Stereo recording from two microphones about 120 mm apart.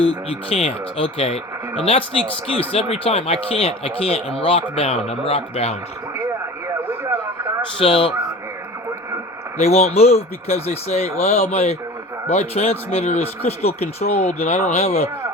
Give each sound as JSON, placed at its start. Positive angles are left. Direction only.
{"t": 0.0, "sound": "speech", "side_deg": 50}
{"t": 6.8, "sound": "radio", "side_deg": -15}
{"t": 7.8, "sound": "speech", "side_deg": 45}
{"t": 9.6, "sound": "speech", "side_deg": 60}